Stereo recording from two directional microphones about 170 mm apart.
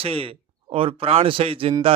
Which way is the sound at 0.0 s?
35° right (ahead or behind).